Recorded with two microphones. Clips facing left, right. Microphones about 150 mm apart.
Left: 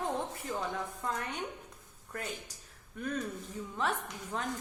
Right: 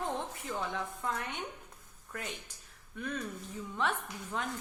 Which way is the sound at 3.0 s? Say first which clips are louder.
Left 2 dB; 40° left (ahead or behind).